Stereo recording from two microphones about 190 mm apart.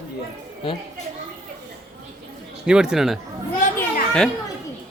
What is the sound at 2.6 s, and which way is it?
Speech, 5° right (ahead or behind).